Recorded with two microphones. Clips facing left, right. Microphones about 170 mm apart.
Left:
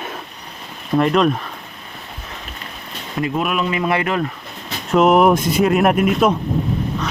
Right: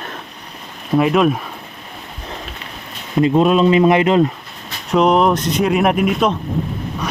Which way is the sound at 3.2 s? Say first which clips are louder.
Right 8 dB; 25° right (ahead or behind).